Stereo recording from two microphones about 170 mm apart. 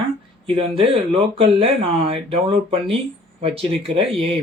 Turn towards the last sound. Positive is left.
turn(degrees=-35)  # may be behind; listen again after turning